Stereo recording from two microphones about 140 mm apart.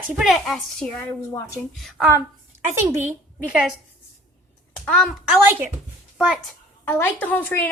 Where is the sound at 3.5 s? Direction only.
5° right (ahead or behind).